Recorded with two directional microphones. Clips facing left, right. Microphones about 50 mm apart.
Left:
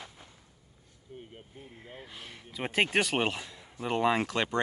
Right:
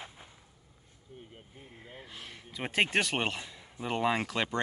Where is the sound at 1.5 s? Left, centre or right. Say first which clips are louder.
Left 1 dB; centre.